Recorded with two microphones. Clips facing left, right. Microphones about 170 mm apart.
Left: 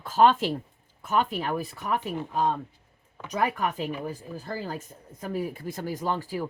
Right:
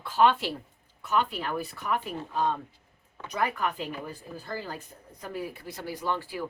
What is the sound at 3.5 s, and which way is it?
Speech, 40° left (ahead or behind).